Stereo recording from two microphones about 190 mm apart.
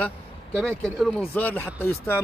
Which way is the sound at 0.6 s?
5° left (ahead or behind).